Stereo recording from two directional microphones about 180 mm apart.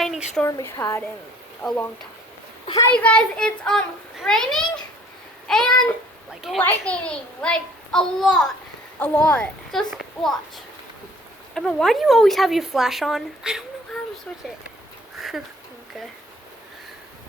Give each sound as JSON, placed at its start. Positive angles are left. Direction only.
{"t": 0.0, "sound": "a sound", "side_deg": 0}
{"t": 0.4, "sound": "a child's voice", "side_deg": 15}
{"t": 11.5, "sound": "speech", "side_deg": 0}